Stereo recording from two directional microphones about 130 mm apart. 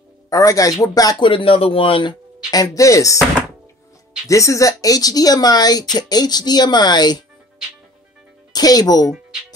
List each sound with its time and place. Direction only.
0.3 s speech: 25° left (ahead or behind)
1.3 s speech: 45° left (ahead or behind)
2.5 s speech: 25° left (ahead or behind)
4.3 s speech: 25° left (ahead or behind)
8.5 s speech: 30° left (ahead or behind)